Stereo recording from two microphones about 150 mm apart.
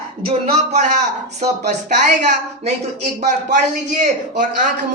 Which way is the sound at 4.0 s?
60° right (ahead or behind).